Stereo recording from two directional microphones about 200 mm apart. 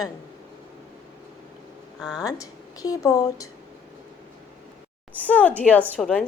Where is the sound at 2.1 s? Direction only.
20° left (ahead or behind).